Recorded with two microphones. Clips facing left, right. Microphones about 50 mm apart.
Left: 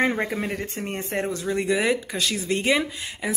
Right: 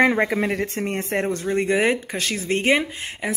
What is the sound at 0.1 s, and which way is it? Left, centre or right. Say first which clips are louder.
Speech: right 5 dB; right.